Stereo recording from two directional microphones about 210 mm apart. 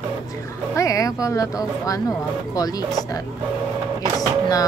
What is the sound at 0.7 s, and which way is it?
Speech, 15° left (ahead or behind).